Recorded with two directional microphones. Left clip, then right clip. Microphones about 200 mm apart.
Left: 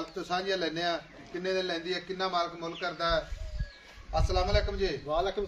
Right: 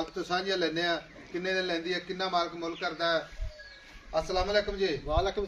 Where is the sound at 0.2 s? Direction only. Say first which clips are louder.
Right 1 dB; 10° right (ahead or behind).